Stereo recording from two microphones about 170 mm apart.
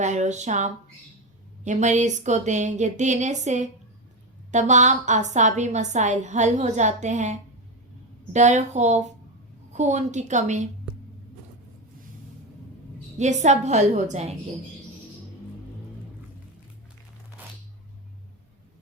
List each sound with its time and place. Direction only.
0.0 s a woman's voice: 45° right (ahead or behind)
13.1 s a woman's voice: 45° right (ahead or behind)
17.4 s a sound: 10° right (ahead or behind)